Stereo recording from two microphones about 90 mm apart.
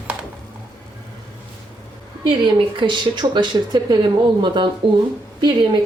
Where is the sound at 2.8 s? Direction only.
55° right (ahead or behind).